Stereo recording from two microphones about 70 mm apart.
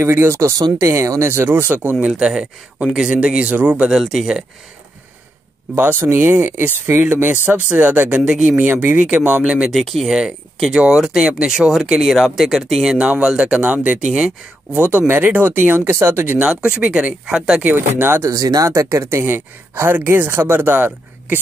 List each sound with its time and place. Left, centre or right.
0.0 s speech: right
1.3 s speech: right
2.0 s speech: centre
4.1 s speech: centre
5.8 s speech: right; by 8.5 s centre
8.5 s speech: right
9.7 s speech: centre
12.9 s speech: centre
14.8 s speech: right
16.3 s speech: centre
17.6 s speech: right
18.2 s speech: right